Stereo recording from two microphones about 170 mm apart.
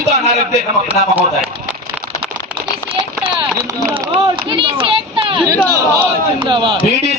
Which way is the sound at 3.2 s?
30° right (ahead or behind).